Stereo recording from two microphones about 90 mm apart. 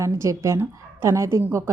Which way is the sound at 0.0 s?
35° right (ahead or behind).